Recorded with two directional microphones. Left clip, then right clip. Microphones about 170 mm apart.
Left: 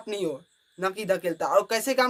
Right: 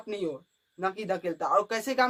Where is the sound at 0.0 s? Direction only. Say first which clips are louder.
Left 3 dB; 20° left (ahead or behind).